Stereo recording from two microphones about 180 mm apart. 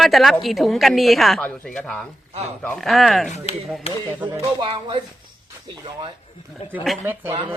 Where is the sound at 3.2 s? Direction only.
35° left (ahead or behind).